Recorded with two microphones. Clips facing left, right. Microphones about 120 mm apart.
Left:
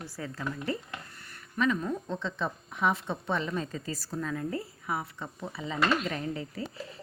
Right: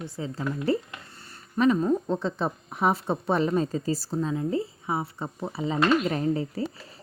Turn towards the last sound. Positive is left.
turn(degrees=-35)  # may be behind; listen again after turning